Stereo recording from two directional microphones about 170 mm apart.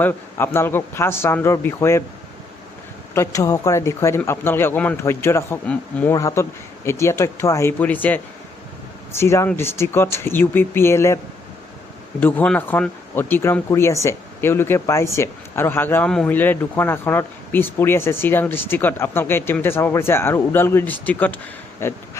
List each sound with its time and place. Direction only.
0.0 s speech: 10° left (ahead or behind)
3.2 s speech: 20° left (ahead or behind)
12.2 s speech: 10° left (ahead or behind)
21.8 s a sound: 15° left (ahead or behind)